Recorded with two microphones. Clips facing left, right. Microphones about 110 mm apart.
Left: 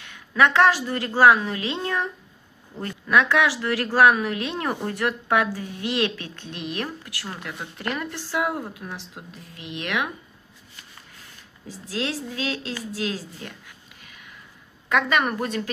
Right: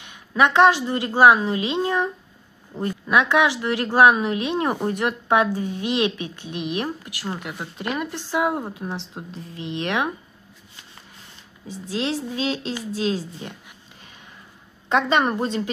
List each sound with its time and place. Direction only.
0.0 s speech: 20° right (ahead or behind)
11.6 s a woman's voice: 20° right (ahead or behind)